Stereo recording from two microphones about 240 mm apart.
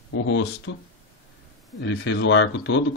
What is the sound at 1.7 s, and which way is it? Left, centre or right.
Speech, left.